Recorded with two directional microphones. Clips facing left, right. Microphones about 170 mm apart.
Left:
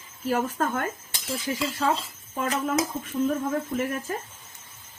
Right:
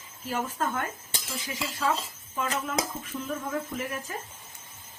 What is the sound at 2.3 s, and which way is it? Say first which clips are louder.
Speech: left 4 dB; 40° left (ahead or behind).